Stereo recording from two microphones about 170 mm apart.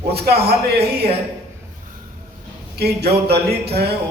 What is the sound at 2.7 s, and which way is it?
Speech, 70° right (ahead or behind).